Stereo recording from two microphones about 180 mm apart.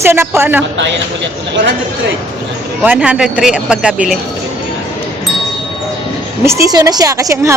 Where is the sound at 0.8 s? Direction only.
85° right.